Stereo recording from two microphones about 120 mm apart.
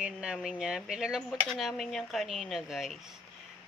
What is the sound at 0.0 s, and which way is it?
Speech, 10° right (ahead or behind).